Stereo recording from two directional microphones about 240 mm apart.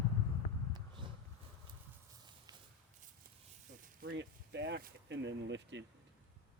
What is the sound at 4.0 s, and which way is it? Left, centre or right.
Speech, right.